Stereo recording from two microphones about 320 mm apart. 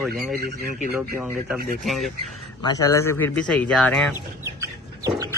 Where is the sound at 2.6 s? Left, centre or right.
Centre.